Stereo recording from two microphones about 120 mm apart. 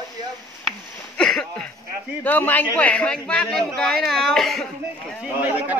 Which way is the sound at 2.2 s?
15° left (ahead or behind).